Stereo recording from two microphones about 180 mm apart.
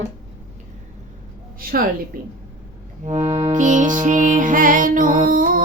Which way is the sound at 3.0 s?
35° right (ahead or behind).